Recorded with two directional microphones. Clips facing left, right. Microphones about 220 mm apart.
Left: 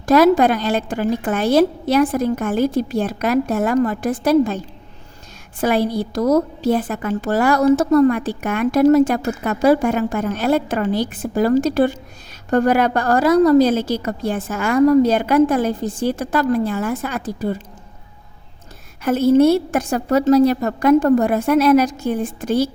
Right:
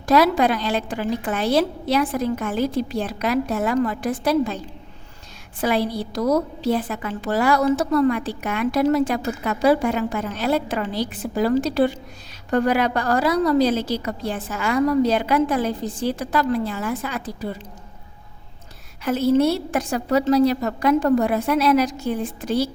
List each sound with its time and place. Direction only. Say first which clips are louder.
0.0 s a woman's voice: left 5 dB; 50° left (ahead or behind)
19.0 s a woman's voice: left 5 dB; 50° left (ahead or behind)